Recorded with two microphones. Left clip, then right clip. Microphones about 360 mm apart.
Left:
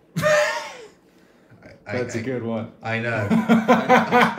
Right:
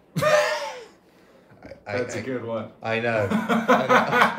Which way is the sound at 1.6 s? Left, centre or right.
Centre.